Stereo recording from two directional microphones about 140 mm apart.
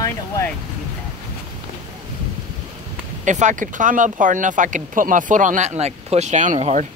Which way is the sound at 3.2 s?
60° right (ahead or behind).